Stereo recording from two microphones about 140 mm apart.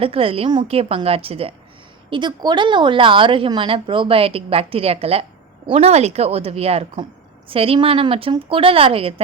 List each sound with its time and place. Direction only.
0.0 s a woman's voice: 40° right (ahead or behind)